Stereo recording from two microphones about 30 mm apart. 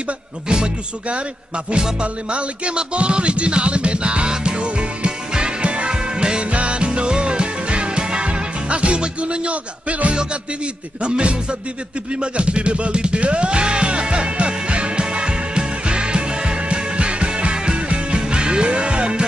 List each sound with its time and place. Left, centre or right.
2.0 s music: right
6.4 s music: right
11.0 s music: right